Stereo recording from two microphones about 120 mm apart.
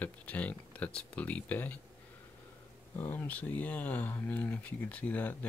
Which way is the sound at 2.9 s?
15° left (ahead or behind).